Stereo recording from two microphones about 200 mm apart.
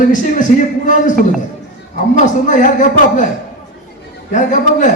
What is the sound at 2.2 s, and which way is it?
A man's voice, 40° left (ahead or behind).